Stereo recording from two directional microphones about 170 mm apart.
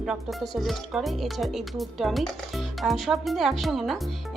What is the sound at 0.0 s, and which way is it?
Speech, centre (ahead or behind).